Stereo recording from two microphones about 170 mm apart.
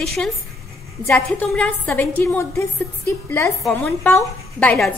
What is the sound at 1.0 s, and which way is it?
A woman's voice, 5° left (ahead or behind).